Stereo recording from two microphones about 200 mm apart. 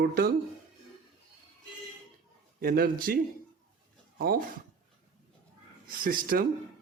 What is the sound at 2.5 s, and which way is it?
Speech, 50° right (ahead or behind).